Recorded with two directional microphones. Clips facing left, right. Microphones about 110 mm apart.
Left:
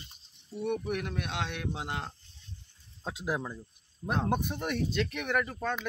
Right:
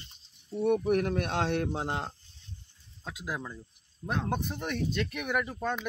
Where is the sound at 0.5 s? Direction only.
35° right (ahead or behind).